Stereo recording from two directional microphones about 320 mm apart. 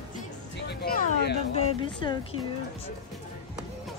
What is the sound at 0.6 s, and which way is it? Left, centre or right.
Music, left.